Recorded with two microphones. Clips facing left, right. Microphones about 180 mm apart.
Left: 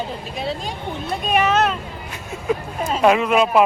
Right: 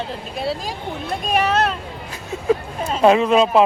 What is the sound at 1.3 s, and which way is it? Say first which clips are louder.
Speech: left 1 dB; 35° right (ahead or behind).